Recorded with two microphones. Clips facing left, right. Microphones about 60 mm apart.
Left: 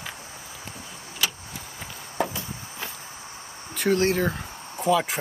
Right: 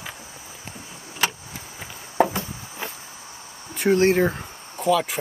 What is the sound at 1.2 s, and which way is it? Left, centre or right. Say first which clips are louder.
Vehicle: right 4 dB; right.